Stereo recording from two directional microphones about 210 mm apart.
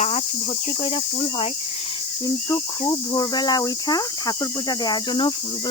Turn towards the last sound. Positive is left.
turn(degrees=20)  # may be behind; listen again after turning